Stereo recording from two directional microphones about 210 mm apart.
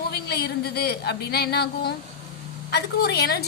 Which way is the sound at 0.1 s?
50° left (ahead or behind).